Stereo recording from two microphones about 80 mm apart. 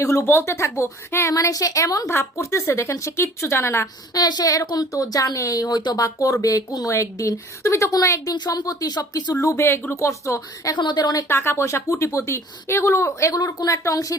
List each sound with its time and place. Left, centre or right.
0.0 s speech: left
1.3 s a woman's voice: left
4.1 s a woman's voice: left
10.8 s a woman's voice: left
11.3 s speech: left
13.3 s a woman's voice: left
13.7 s a woman's voice: left